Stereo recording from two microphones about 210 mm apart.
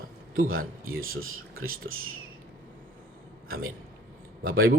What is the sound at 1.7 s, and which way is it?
Speech, 75° right (ahead or behind).